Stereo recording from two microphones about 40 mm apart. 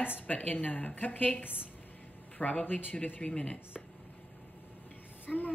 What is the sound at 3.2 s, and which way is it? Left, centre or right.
Speech, left.